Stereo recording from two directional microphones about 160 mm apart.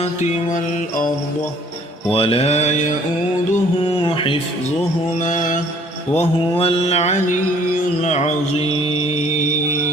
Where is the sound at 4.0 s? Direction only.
35° left (ahead or behind).